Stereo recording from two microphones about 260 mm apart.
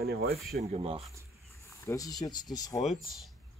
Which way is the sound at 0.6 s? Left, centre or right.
Right.